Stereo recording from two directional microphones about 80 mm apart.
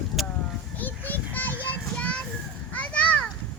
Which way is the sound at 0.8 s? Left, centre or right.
Left.